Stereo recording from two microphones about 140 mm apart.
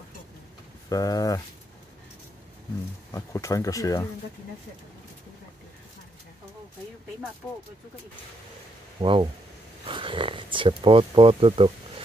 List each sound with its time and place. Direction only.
0.8 s speech: 25° left (ahead or behind)
3.1 s speech: 25° left (ahead or behind)
9.0 s speech: 40° right (ahead or behind)